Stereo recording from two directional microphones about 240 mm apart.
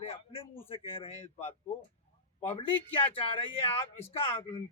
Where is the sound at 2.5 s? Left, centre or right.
Left.